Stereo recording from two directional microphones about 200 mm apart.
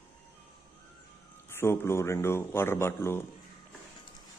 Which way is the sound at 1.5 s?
10° left (ahead or behind).